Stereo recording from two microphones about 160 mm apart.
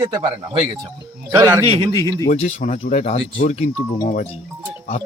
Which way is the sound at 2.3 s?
40° left (ahead or behind).